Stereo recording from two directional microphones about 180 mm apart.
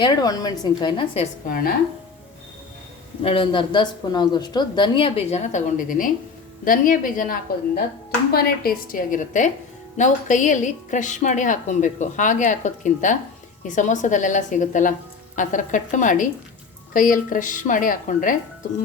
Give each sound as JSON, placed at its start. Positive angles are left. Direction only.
{"t": 0.0, "sound": "a woman's voice", "side_deg": 25}
{"t": 1.5, "sound": "a woman's voice", "side_deg": 50}
{"t": 3.2, "sound": "a woman's voice", "side_deg": 30}